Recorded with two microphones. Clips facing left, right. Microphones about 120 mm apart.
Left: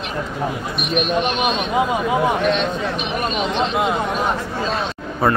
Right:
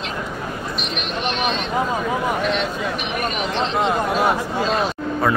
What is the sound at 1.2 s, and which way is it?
Speech, 15° left (ahead or behind).